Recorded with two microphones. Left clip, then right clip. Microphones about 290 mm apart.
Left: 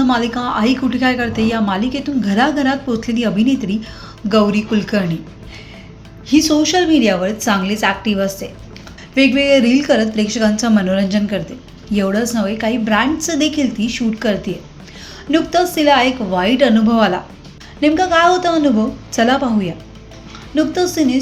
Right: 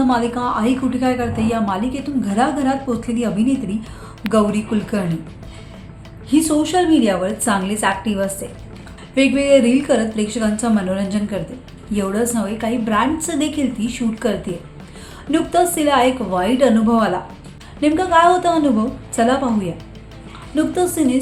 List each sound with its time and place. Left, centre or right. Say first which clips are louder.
0.1 s a woman's voice: left 1 dB; centre
6.2 s a woman's voice: left 3 dB; centre